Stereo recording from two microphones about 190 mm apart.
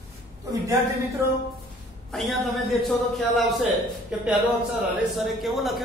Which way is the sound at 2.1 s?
Centre (ahead or behind).